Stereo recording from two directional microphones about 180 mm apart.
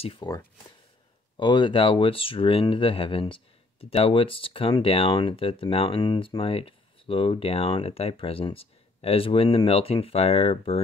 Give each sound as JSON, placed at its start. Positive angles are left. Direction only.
{"t": 0.0, "sound": "speech", "side_deg": 30}
{"t": 1.3, "sound": "speech", "side_deg": 25}